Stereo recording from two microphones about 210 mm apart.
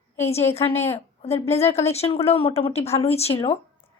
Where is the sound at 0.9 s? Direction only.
30° left (ahead or behind).